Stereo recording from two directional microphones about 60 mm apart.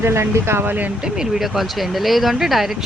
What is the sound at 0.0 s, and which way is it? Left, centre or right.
Speech, right.